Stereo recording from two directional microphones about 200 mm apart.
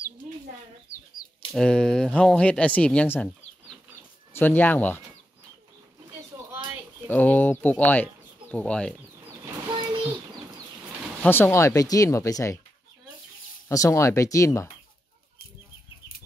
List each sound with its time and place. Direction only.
1.5 s speech: 5° left (ahead or behind)
7.1 s speech: 10° left (ahead or behind)
11.2 s speech: 10° left (ahead or behind)
13.7 s speech: 15° left (ahead or behind)